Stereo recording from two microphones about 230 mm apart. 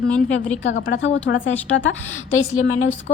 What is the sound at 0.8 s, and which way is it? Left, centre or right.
Speech, left.